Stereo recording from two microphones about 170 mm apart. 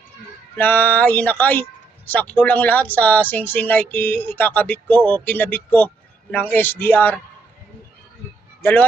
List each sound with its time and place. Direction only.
0.5 s speech: 10° left (ahead or behind)